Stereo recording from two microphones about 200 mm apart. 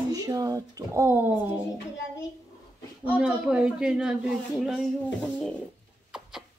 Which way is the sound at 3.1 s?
5° right (ahead or behind).